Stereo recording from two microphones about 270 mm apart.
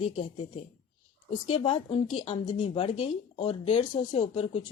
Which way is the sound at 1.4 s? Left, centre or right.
Left.